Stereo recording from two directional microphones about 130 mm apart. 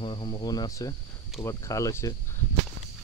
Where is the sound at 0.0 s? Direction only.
40° left (ahead or behind); by 2.1 s 25° left (ahead or behind).